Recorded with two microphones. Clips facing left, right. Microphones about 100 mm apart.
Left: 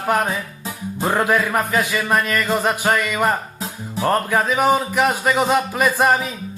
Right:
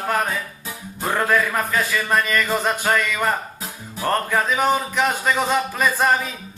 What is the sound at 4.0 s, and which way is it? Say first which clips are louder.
Speech: left 3 dB; 5° left (ahead or behind).